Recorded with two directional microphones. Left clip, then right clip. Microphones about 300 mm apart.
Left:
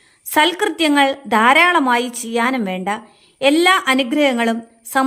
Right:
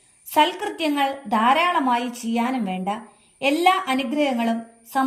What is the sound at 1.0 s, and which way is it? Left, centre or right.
Speech, left.